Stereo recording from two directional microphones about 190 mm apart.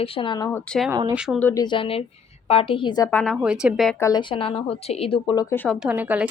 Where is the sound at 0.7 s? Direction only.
Centre (ahead or behind).